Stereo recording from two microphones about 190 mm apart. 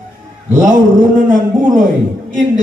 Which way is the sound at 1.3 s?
45° right (ahead or behind).